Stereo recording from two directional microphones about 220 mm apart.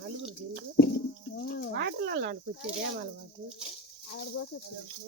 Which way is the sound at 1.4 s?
50° left (ahead or behind).